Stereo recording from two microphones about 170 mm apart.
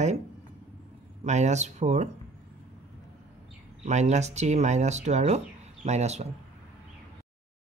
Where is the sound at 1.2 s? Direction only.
40° right (ahead or behind).